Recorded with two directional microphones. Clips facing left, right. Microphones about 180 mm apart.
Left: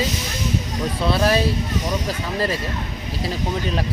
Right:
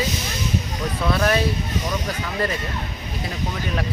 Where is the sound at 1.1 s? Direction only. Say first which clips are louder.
Left 2 dB; 30° left (ahead or behind).